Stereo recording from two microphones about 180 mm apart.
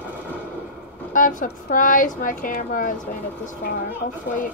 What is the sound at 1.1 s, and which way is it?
A woman's voice, 45° left (ahead or behind).